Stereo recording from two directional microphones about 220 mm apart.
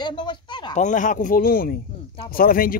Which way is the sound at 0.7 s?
35° left (ahead or behind).